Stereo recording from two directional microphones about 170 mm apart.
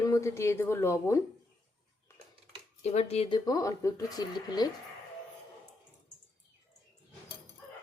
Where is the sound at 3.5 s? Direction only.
20° left (ahead or behind).